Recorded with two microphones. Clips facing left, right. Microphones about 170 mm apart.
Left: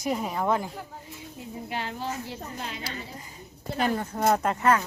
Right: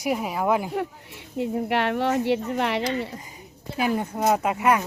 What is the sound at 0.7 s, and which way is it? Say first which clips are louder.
A woman's voice: right 11 dB; 70° right (ahead or behind).